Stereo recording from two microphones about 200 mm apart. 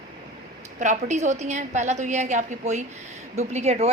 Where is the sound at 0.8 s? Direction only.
35° right (ahead or behind).